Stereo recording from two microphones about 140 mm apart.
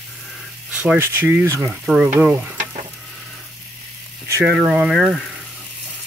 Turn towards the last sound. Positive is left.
turn(degrees=0)  # may be behind; listen again after turning